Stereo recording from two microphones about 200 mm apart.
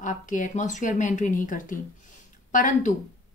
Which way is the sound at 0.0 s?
40° left (ahead or behind).